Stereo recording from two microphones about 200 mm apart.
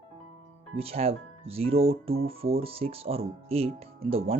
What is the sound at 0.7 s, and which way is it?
Speech, 30° right (ahead or behind).